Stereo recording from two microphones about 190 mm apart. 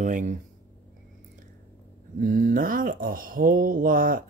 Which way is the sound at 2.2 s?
45° right (ahead or behind).